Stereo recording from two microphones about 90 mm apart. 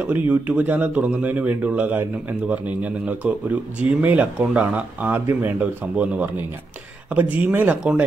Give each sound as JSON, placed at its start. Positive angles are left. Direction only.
{"t": 0.0, "sound": "speech", "side_deg": -15}